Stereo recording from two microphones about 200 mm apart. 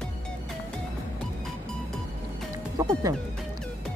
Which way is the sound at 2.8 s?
15° right (ahead or behind).